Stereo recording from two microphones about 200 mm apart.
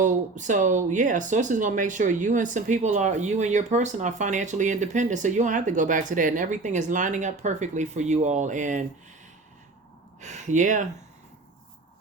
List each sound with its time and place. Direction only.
0.0 s speech: 40° right (ahead or behind)
10.2 s speech: 35° right (ahead or behind)